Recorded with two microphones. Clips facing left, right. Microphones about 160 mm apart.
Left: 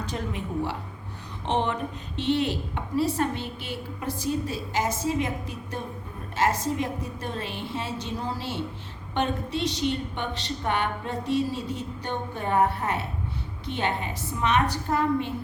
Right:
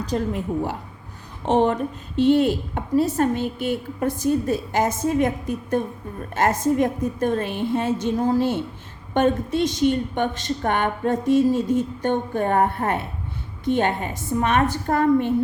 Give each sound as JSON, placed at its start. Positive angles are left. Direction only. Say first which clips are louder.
{"t": 0.0, "sound": "a woman's voice", "louder": "right 7 dB", "side_deg": -40}